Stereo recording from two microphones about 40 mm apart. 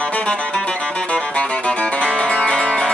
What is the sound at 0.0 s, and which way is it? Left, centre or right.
Music, left.